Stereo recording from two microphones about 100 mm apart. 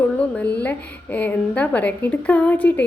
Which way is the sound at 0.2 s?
15° left (ahead or behind).